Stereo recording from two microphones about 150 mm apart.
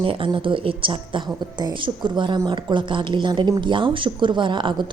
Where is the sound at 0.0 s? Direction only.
35° right (ahead or behind).